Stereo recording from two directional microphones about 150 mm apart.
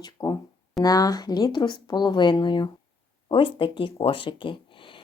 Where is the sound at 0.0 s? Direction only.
25° left (ahead or behind).